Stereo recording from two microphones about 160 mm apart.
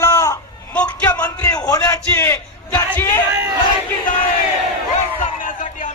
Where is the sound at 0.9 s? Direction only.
25° left (ahead or behind).